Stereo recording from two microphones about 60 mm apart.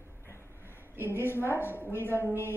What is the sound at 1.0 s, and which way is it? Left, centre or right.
A woman's voice, left.